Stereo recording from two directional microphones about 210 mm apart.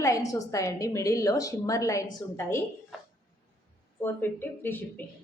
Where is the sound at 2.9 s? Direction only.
Centre (ahead or behind).